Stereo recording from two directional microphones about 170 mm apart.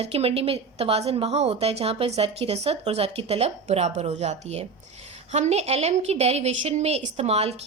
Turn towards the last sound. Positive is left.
turn(degrees=-35)  # may be behind; listen again after turning